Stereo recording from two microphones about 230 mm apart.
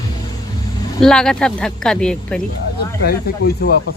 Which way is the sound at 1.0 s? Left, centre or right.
Centre.